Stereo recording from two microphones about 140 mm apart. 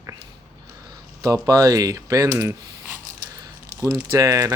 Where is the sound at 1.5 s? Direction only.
25° right (ahead or behind).